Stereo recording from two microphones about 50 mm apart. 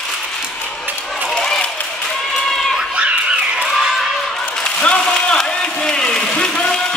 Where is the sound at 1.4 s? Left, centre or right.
Centre.